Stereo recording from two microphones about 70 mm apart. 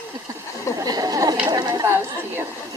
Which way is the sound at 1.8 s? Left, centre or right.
Right.